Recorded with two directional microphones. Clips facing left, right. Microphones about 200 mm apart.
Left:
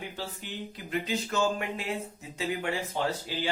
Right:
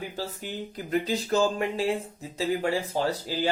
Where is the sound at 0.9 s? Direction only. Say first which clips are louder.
Right 5 dB; 35° right (ahead or behind).